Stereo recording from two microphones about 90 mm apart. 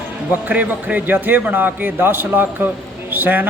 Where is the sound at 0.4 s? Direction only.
15° right (ahead or behind).